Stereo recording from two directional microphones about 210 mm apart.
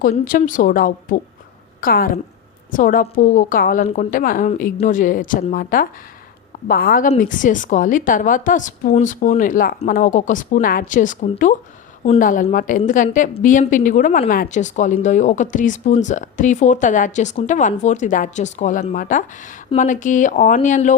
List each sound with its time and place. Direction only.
0.0 s a woman's voice: 40° left (ahead or behind)